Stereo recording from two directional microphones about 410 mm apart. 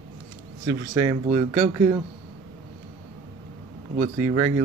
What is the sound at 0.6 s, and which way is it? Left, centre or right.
Speech, centre.